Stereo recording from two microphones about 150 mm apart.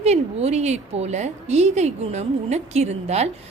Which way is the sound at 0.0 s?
45° right (ahead or behind).